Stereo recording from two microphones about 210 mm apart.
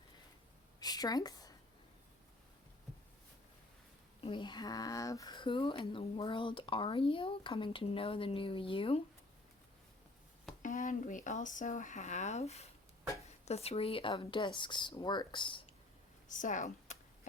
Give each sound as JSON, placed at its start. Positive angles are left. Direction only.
{"t": 0.8, "sound": "a sound", "side_deg": 20}
{"t": 4.2, "sound": "speech", "side_deg": 20}
{"t": 10.6, "sound": "speech", "side_deg": 35}
{"t": 16.3, "sound": "speech", "side_deg": 35}